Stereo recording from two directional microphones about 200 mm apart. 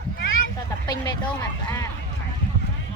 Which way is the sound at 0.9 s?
20° left (ahead or behind).